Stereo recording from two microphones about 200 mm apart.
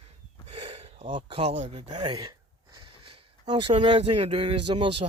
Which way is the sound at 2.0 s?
20° right (ahead or behind).